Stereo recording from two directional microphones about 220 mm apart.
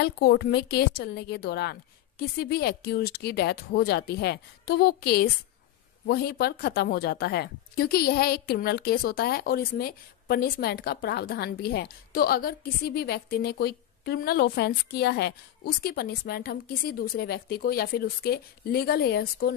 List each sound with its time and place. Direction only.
0.0 s a woman's voice: 45° left (ahead or behind)